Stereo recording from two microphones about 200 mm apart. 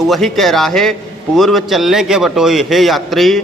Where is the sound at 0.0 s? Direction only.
Centre (ahead or behind).